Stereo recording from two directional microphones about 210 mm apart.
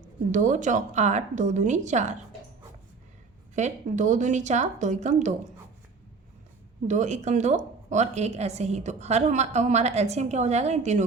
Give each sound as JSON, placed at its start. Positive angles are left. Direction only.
{"t": 0.3, "sound": "a woman's voice", "side_deg": -35}
{"t": 3.5, "sound": "a woman's voice", "side_deg": -35}
{"t": 6.8, "sound": "a woman's voice", "side_deg": -35}